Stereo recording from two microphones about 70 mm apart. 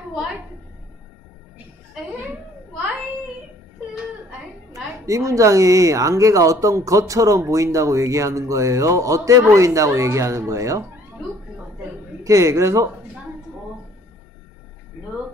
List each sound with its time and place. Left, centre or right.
5.0 s speech: right
12.2 s speech: right